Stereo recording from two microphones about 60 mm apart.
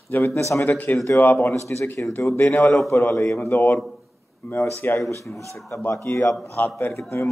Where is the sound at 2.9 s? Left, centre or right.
Left.